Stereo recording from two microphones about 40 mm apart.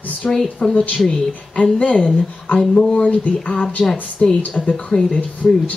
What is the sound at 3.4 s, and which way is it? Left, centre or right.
Speech, left.